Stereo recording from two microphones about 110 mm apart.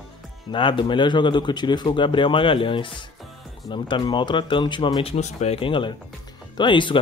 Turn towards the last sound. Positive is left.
turn(degrees=45)  # may be behind; listen again after turning